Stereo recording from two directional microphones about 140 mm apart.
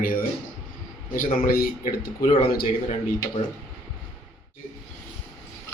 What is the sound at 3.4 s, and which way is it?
Speech, 50° left (ahead or behind).